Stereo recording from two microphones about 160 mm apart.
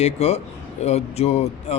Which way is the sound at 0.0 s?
40° left (ahead or behind).